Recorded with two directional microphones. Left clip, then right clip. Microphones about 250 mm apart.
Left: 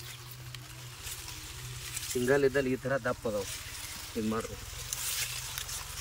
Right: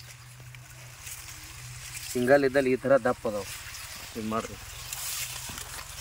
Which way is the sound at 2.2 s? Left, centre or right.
Right.